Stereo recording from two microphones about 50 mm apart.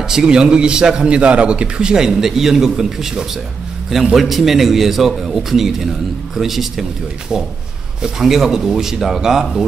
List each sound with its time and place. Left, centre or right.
0.1 s a man's voice: centre